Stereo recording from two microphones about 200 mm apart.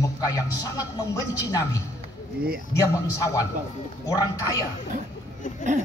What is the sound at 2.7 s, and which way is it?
A man's voice, 15° left (ahead or behind).